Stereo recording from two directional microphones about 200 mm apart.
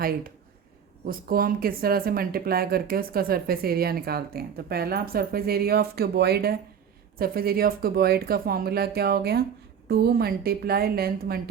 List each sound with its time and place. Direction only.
1.0 s speech: 45° right (ahead or behind)